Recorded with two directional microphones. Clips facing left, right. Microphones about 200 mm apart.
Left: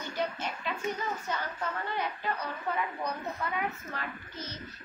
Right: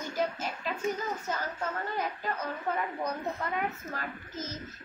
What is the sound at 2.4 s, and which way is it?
A woman's voice, 45° right (ahead or behind).